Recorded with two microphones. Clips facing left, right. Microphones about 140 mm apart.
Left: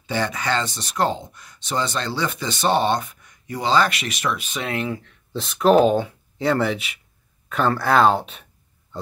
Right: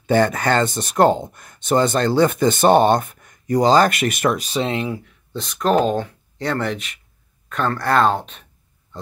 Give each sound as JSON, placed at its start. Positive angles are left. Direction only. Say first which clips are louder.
{"t": 0.0, "sound": "speech", "louder": "right 8 dB", "side_deg": -50}
{"t": 4.7, "sound": "speech", "louder": "right 2 dB", "side_deg": -10}
{"t": 5.3, "sound": "speech", "louder": "left 2 dB", "side_deg": 0}